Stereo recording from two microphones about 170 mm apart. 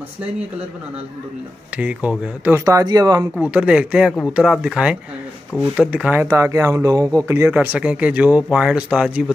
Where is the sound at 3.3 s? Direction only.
10° right (ahead or behind).